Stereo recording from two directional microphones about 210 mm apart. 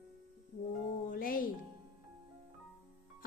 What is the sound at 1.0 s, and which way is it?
Speech, 40° left (ahead or behind).